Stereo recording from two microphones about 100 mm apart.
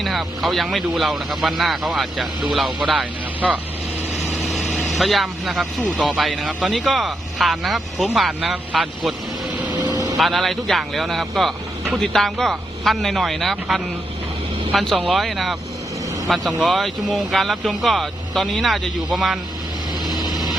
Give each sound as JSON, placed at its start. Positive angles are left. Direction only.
{"t": 0.0, "sound": "speech", "side_deg": 0}
{"t": 4.3, "sound": "vehicle", "side_deg": 0}
{"t": 4.8, "sound": "speech", "side_deg": 0}
{"t": 10.2, "sound": "speech", "side_deg": 0}